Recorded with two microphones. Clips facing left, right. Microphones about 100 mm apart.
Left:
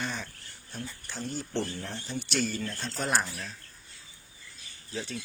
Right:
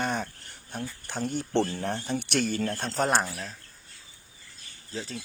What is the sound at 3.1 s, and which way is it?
Speech, 30° right (ahead or behind).